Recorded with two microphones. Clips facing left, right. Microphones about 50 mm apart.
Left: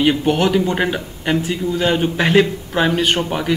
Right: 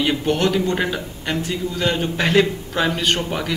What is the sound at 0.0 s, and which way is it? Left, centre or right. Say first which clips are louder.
Speech: left 4 dB; centre.